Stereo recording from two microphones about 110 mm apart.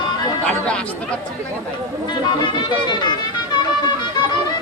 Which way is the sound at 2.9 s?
40° left (ahead or behind).